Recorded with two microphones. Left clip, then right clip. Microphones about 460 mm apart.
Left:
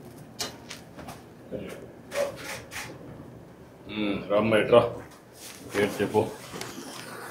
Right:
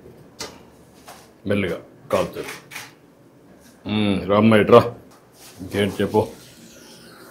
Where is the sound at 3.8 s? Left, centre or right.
Right.